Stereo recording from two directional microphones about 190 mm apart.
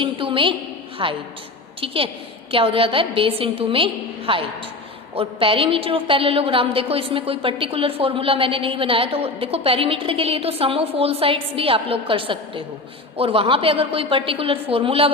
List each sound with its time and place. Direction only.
0.0 s a woman's voice: 25° right (ahead or behind)